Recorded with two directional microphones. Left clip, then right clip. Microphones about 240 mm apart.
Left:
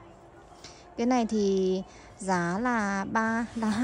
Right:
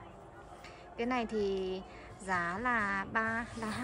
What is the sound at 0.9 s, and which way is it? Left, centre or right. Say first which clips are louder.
A woman's voice: left 7 dB; left.